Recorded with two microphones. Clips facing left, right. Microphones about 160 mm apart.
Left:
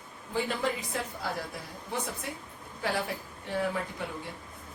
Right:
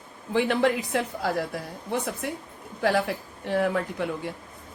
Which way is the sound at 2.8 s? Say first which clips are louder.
Right 8 dB; 85° right.